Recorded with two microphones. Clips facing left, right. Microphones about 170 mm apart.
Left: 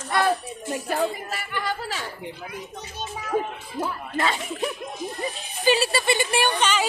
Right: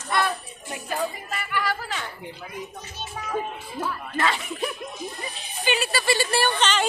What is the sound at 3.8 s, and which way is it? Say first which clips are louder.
Speech: even; 20° left (ahead or behind).